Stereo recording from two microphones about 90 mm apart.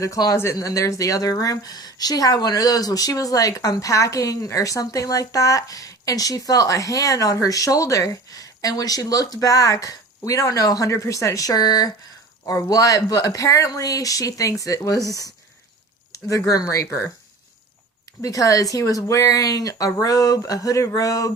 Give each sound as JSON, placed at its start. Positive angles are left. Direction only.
{"t": 0.0, "sound": "a woman's voice", "side_deg": 40}
{"t": 18.2, "sound": "a woman's voice", "side_deg": 40}